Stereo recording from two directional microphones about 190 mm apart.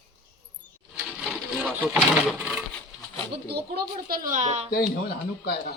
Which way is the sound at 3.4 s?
55° right (ahead or behind).